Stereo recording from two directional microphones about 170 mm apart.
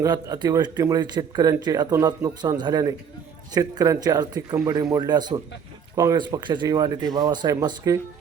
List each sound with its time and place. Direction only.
0.0 s speech: 20° right (ahead or behind)